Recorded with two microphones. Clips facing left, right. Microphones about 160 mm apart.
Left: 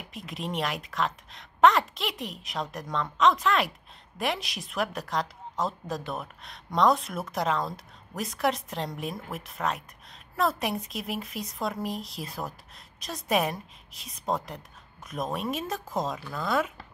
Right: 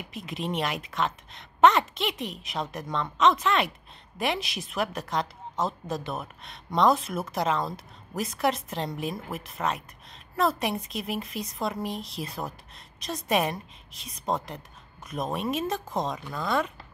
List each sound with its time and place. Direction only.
0.0 s a woman's voice: centre (ahead or behind)